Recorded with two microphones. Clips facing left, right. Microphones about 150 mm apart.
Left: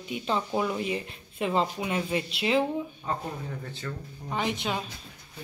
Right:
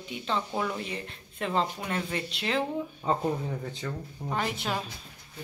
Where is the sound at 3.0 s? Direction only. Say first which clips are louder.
Right 6 dB; 30° right (ahead or behind).